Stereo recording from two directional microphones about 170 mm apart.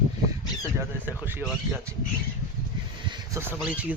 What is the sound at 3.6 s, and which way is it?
Speech, 10° right (ahead or behind).